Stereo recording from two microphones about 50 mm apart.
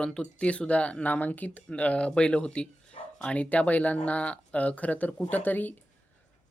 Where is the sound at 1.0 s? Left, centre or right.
Left.